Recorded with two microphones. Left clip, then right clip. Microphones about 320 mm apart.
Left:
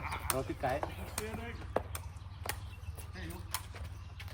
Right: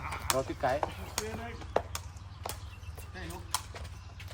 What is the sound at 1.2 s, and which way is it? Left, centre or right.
Speech, centre.